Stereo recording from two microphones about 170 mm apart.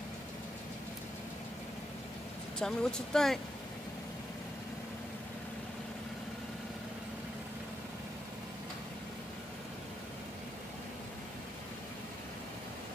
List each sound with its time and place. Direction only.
2.6 s speech: 5° left (ahead or behind)